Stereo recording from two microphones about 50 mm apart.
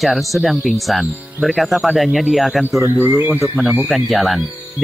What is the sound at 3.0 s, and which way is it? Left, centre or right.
Speech, right.